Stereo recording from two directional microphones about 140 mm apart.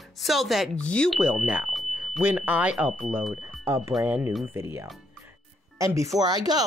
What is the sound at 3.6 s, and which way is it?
Speech, 20° right (ahead or behind).